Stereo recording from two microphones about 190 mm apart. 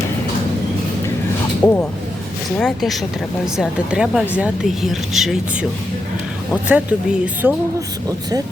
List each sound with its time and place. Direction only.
1.6 s speech: 10° left (ahead or behind)
6.7 s speech: 5° right (ahead or behind)